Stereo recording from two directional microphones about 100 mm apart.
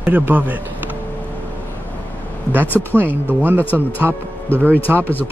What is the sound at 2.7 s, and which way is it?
Speech, 20° right (ahead or behind).